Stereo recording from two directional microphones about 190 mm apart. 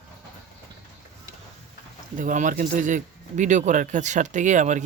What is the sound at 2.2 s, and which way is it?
Speech, 45° right (ahead or behind).